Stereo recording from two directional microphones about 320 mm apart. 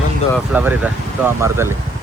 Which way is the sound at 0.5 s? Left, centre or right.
Centre.